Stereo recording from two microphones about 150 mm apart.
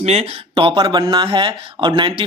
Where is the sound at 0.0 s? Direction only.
40° right (ahead or behind).